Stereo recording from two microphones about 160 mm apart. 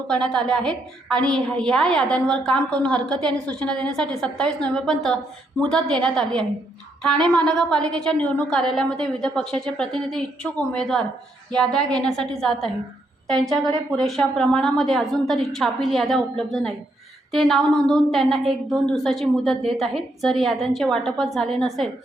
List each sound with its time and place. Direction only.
0.1 s a woman's voice: 5° left (ahead or behind)
13.9 s a woman's voice: 5° left (ahead or behind)